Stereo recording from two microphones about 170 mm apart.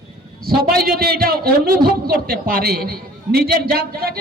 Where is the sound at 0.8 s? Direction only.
65° right (ahead or behind).